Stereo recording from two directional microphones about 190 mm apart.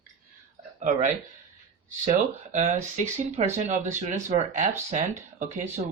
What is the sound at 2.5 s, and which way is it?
Speech, 40° right (ahead or behind).